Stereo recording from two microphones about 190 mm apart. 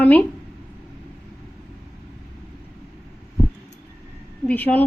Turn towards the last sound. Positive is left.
turn(degrees=10)  # may be behind; listen again after turning